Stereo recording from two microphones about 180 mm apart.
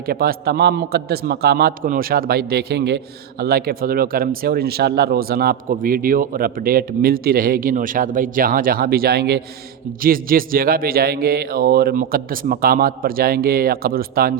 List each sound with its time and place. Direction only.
0.0 s a man's voice: 55° right (ahead or behind)